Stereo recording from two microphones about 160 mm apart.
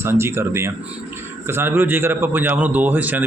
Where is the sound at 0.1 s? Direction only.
15° right (ahead or behind).